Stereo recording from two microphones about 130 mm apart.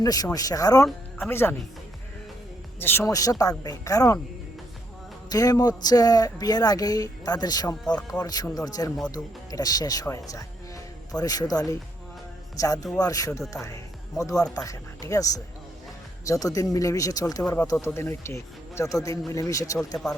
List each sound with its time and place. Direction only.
0.0 s speech: 30° left (ahead or behind)
2.7 s speech: 20° left (ahead or behind)
5.3 s speech: 30° left (ahead or behind)